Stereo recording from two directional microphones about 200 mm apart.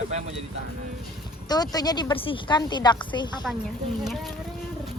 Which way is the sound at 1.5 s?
20° left (ahead or behind).